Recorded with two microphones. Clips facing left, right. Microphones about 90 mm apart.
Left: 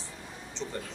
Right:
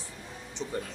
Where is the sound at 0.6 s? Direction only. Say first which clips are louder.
Even; 15° right (ahead or behind).